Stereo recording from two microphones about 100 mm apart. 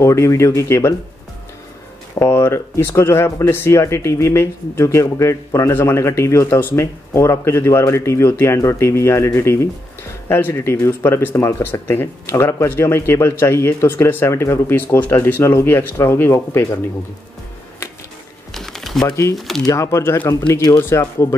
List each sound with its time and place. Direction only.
0.0 s speech: 30° left (ahead or behind)
2.1 s speech: 25° left (ahead or behind)
18.5 s typing: 5° left (ahead or behind)
19.3 s speech: centre (ahead or behind)
19.6 s speech: 30° left (ahead or behind)